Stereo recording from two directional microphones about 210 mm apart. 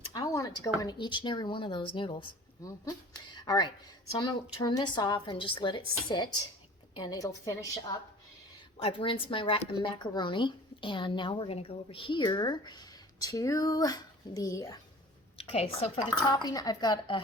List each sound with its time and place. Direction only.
0.1 s speech: 15° left (ahead or behind)
3.3 s a woman's voice: 20° left (ahead or behind)
8.8 s speech: 25° left (ahead or behind)
15.4 s a woman's voice: 30° left (ahead or behind)
16.0 s speech: 15° left (ahead or behind)